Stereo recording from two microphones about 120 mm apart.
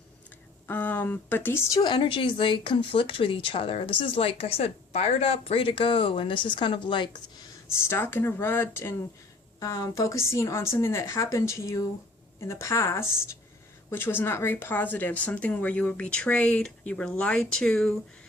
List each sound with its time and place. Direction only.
0.7 s speech: 15° left (ahead or behind)
1.7 s a woman's voice: 40° left (ahead or behind)
7.7 s a woman's voice: 20° left (ahead or behind)